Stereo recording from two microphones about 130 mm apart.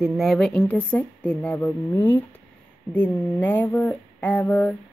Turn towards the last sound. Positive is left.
turn(degrees=10)  # may be behind; listen again after turning